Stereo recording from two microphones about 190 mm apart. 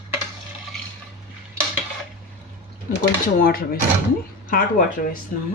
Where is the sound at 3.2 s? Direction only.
50° left (ahead or behind).